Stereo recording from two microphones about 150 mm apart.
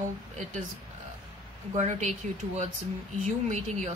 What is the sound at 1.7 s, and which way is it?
Speech, 50° right (ahead or behind).